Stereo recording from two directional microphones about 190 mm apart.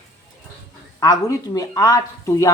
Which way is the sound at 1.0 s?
20° left (ahead or behind).